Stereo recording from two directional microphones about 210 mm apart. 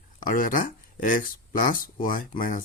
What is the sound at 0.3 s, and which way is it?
A man's voice, 40° left (ahead or behind).